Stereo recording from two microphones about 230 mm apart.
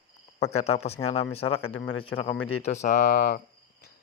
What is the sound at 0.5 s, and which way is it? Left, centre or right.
Speech, left.